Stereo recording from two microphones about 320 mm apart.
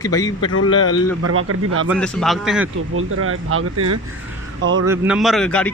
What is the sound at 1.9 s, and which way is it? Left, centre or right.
Speech, centre.